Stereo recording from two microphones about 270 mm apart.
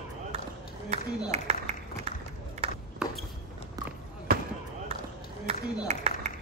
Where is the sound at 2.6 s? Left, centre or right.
Right.